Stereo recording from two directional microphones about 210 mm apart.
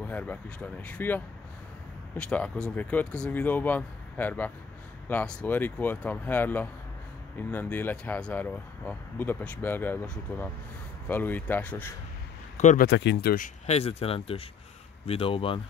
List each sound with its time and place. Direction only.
0.0 s speech: 10° left (ahead or behind)
12.5 s speech: 35° left (ahead or behind)
12.8 s speech: 55° left (ahead or behind)
13.7 s speech: 30° left (ahead or behind)